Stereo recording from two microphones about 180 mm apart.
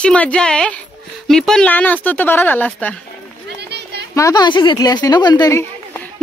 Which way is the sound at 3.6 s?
70° right (ahead or behind).